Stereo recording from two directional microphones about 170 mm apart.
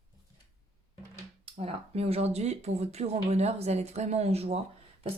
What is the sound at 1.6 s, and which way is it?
Speech, 35° right (ahead or behind).